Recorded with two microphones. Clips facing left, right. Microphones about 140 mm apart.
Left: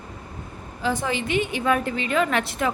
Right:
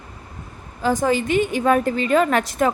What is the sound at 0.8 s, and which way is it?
A woman's voice, 45° right (ahead or behind).